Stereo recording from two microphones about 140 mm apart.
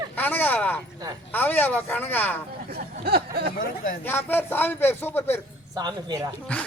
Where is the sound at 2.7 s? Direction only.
90° right.